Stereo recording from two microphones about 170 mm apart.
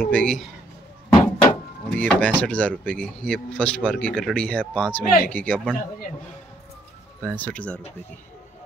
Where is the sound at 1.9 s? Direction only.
10° left (ahead or behind).